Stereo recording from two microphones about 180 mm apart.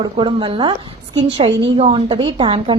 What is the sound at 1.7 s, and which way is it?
A woman's voice, 30° right (ahead or behind).